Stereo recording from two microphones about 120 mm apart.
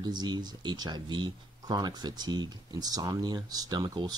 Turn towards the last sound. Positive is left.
turn(degrees=-35)  # may be behind; listen again after turning